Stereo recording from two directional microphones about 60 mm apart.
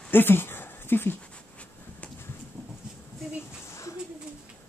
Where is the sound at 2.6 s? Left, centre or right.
Left.